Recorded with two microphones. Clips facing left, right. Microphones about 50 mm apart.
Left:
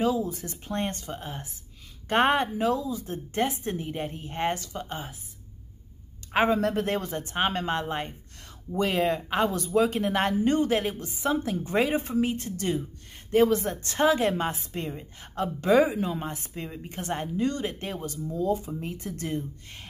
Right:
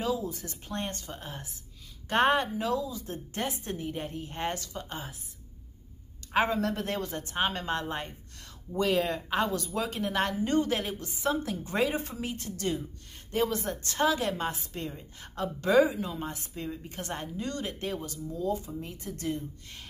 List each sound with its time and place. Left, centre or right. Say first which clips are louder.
0.0 s a woman's voice: left 5 dB; left
6.3 s a woman's voice: left 4 dB; left